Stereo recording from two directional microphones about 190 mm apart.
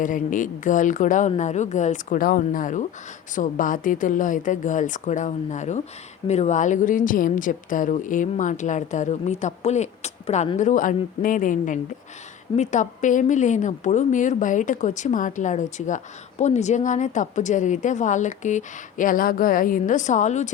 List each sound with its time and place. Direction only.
0.0 s a woman's voice: 45° left (ahead or behind)